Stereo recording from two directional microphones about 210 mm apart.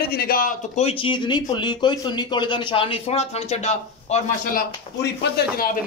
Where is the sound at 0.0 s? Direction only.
45° left (ahead or behind).